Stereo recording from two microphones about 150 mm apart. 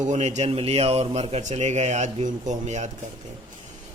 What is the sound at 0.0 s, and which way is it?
A man's voice, 50° right (ahead or behind).